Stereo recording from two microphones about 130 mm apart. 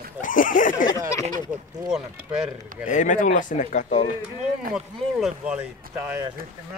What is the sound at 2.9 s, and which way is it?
Speech, 75° left (ahead or behind).